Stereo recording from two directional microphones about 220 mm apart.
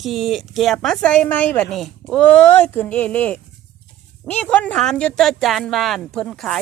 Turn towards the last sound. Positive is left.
turn(degrees=5)  # may be behind; listen again after turning